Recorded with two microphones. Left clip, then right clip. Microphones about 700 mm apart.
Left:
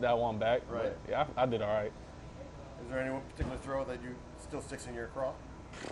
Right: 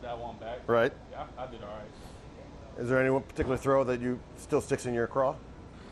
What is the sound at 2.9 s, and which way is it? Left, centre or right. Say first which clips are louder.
Speech: right 10 dB; right.